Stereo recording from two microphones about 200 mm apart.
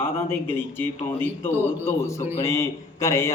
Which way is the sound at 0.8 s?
10° left (ahead or behind).